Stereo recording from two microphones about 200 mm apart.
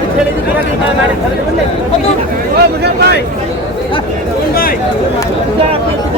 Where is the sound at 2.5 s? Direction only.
55° right (ahead or behind).